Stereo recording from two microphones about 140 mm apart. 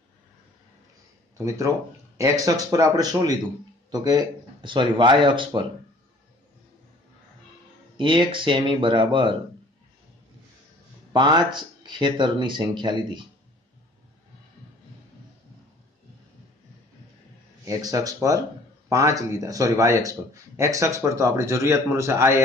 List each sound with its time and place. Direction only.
1.4 s speech: 20° right (ahead or behind)
8.0 s speech: 35° right (ahead or behind)
11.1 s speech: 30° right (ahead or behind)
17.6 s speech: 25° right (ahead or behind)